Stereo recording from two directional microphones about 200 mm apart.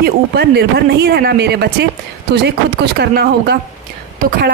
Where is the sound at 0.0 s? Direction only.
55° right (ahead or behind).